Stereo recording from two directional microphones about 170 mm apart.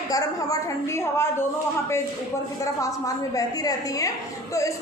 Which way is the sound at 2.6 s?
20° left (ahead or behind).